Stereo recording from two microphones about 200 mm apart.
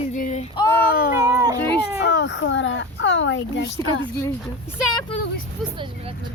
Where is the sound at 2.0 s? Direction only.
60° left (ahead or behind).